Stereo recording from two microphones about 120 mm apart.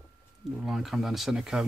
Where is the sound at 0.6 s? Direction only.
Centre (ahead or behind).